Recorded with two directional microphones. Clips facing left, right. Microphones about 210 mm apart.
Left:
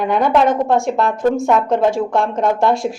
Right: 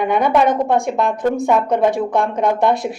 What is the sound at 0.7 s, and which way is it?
A woman's voice, centre (ahead or behind).